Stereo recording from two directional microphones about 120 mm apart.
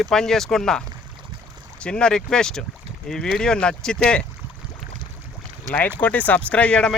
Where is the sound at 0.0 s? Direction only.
5° left (ahead or behind).